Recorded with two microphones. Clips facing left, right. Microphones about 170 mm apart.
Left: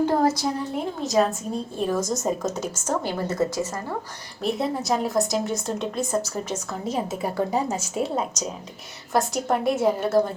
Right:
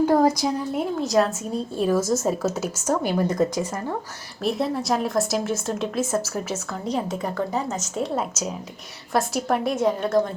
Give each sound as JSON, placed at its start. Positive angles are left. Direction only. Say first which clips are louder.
{"t": 0.0, "sound": "speech", "louder": "right 3 dB", "side_deg": -10}
{"t": 1.0, "sound": "a woman's voice", "louder": "left 1 dB", "side_deg": 0}
{"t": 4.4, "sound": "a woman's voice", "louder": "right 1 dB", "side_deg": 0}